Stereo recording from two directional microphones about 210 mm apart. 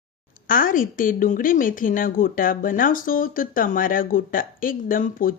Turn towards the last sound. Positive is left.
turn(degrees=40)  # may be behind; listen again after turning